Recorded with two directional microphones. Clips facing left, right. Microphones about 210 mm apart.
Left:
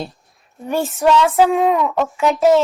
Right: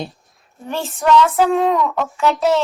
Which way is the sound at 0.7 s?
15° left (ahead or behind).